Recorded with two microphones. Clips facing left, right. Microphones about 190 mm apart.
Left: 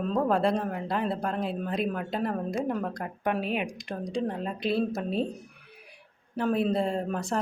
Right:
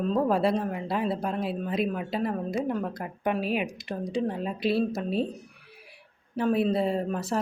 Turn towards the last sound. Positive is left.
turn(degrees=-5)  # may be behind; listen again after turning